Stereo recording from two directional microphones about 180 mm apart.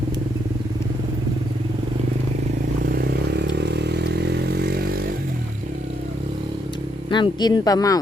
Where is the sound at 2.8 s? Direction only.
60° right (ahead or behind).